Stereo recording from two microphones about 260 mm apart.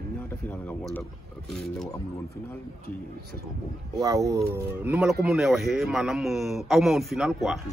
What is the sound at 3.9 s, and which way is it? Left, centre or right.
Speech, centre.